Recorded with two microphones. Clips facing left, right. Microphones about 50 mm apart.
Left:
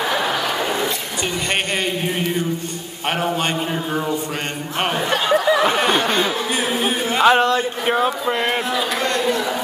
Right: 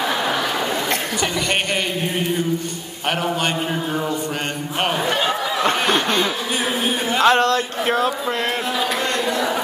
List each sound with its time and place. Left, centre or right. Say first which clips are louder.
3.1 s a man's voice: even; left
5.6 s snicker: left 1 dB; centre
6.0 s speech: left 1 dB; left
7.2 s speech: left 1 dB; centre